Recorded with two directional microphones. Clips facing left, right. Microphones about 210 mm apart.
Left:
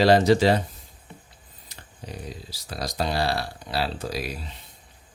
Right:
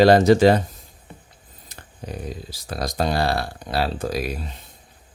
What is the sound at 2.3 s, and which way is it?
Speech, 50° right (ahead or behind).